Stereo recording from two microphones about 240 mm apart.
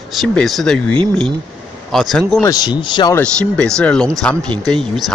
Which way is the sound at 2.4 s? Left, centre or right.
Centre.